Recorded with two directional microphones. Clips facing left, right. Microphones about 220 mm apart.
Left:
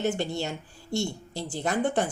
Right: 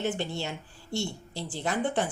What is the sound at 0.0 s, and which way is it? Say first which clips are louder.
Speech: left 3 dB; 45° left (ahead or behind).